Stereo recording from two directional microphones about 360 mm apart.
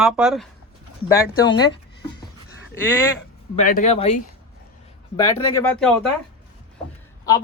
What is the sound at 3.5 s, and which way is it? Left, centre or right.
Speech, left.